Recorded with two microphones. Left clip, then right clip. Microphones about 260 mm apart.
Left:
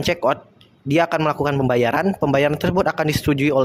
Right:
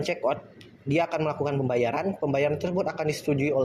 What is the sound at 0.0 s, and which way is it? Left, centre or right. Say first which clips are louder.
Speech: left 7 dB; left.